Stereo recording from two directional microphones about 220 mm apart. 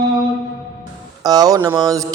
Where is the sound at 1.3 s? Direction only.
15° right (ahead or behind).